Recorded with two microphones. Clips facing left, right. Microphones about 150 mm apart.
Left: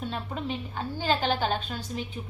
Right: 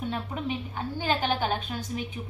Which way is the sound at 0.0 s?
15° right (ahead or behind).